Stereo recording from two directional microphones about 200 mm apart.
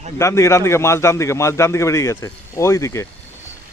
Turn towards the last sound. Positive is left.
turn(degrees=15)  # may be behind; listen again after turning